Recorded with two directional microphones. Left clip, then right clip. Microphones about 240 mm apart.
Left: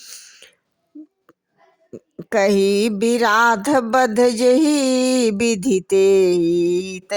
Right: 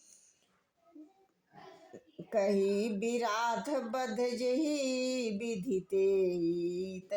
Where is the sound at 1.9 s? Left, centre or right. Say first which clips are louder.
Left 16 dB; left.